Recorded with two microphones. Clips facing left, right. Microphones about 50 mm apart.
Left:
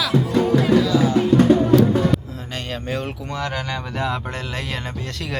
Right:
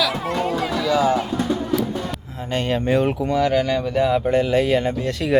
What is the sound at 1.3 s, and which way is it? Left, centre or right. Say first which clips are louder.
Music: left 9 dB; left.